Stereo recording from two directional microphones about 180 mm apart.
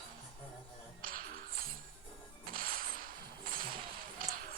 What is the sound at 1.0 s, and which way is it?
Music, 50° right (ahead or behind).